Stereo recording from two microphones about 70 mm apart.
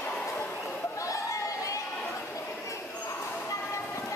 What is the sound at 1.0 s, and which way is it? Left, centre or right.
Chatter, left.